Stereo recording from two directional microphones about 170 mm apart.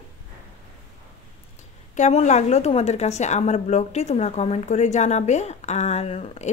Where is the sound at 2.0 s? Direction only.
45° left (ahead or behind).